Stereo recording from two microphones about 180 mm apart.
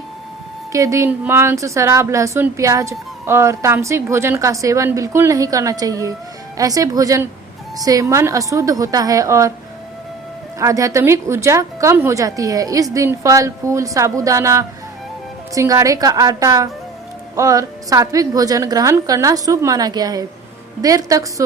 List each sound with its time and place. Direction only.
0.7 s a woman's voice: 15° right (ahead or behind)
10.6 s a woman's voice: 20° right (ahead or behind)